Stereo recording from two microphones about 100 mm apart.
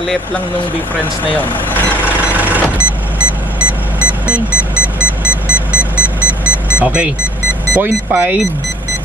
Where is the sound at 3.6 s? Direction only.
15° right (ahead or behind).